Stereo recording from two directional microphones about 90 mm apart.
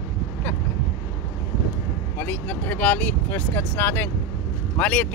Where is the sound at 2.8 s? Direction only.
20° left (ahead or behind).